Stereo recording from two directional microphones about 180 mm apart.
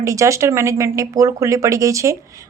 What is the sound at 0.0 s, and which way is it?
Speech, 15° right (ahead or behind).